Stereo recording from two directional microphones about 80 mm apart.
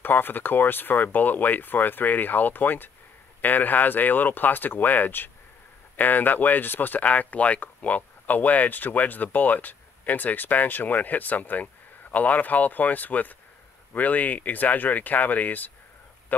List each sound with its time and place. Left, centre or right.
0.0 s a man's voice: left